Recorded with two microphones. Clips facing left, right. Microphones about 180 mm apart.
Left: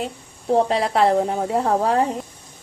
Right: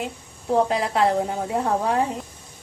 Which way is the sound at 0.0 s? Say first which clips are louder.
Left 2 dB; 30° left (ahead or behind).